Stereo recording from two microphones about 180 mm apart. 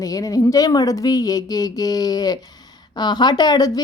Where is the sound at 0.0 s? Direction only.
20° left (ahead or behind).